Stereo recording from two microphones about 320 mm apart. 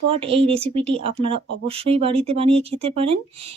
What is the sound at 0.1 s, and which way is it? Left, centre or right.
Speech, centre.